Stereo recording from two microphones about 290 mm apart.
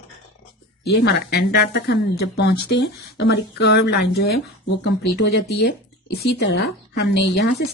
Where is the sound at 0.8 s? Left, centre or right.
Left.